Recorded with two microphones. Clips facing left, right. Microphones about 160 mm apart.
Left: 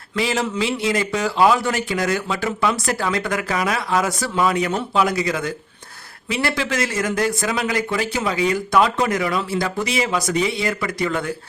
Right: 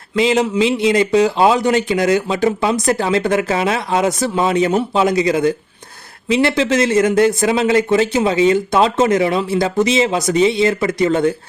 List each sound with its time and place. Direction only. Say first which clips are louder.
0.2 s a man's voice: right 7 dB; 20° right (ahead or behind)